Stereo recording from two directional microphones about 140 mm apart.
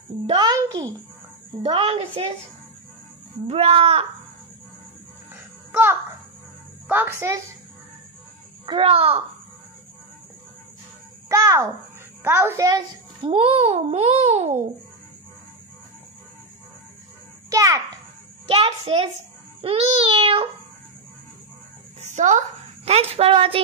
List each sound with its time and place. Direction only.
0.3 s a sound: 30° right (ahead or behind)
1.6 s a child's voice: 45° right (ahead or behind)
3.4 s a child's voice: 45° right (ahead or behind)
5.7 s a child's voice: 15° right (ahead or behind)
8.6 s a child's voice: 40° right (ahead or behind)
11.2 s a child's voice: 20° right (ahead or behind)
12.6 s a child's voice: 35° right (ahead or behind); by 14.6 s 50° right (ahead or behind)
17.5 s a child's voice: 25° right (ahead or behind)
18.5 s a child's voice: 45° right (ahead or behind)
19.6 s child singing: 45° right (ahead or behind)
22.0 s a sound: 55° right (ahead or behind)
22.8 s a child's voice: 50° right (ahead or behind)